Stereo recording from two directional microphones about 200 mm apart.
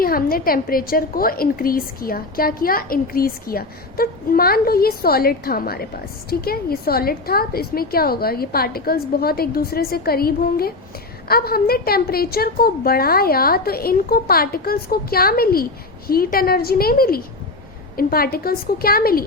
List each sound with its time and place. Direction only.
0.0 s a woman's voice: 45° left (ahead or behind)